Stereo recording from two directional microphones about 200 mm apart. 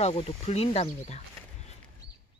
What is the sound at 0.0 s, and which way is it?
Speech, 30° left (ahead or behind).